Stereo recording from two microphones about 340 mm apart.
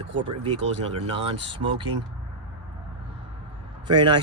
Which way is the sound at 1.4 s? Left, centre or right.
Centre.